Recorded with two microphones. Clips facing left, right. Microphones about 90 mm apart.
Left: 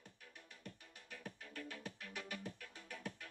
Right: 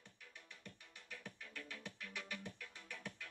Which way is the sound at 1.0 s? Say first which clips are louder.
Left 2 dB; 40° left (ahead or behind).